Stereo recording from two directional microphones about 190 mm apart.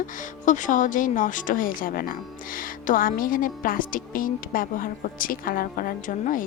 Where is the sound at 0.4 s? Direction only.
40° left (ahead or behind).